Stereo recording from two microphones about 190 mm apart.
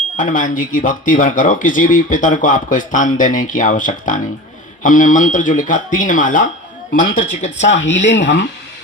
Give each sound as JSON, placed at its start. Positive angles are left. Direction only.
{"t": 0.2, "sound": "speech", "side_deg": 45}
{"t": 7.7, "sound": "speech", "side_deg": 75}